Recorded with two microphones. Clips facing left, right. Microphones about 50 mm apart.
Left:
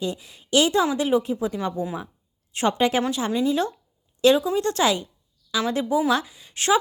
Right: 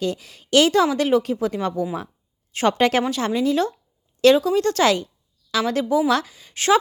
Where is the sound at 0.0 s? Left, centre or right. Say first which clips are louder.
Right 3 dB; right.